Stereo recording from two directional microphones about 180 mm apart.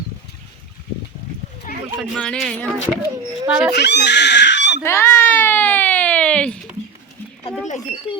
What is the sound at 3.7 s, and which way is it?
Speech, 70° left (ahead or behind).